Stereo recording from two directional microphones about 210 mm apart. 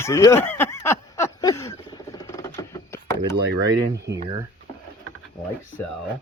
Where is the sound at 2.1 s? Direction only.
15° left (ahead or behind).